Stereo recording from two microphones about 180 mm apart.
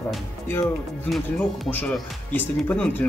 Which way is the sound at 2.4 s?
10° left (ahead or behind).